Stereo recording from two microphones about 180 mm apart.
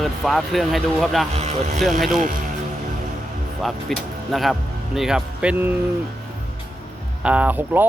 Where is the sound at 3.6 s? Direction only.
Centre (ahead or behind).